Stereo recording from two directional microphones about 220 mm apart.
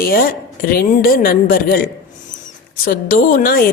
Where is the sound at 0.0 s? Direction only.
40° left (ahead or behind).